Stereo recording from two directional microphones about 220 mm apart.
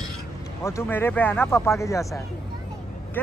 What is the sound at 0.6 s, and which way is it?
Speech, 10° left (ahead or behind).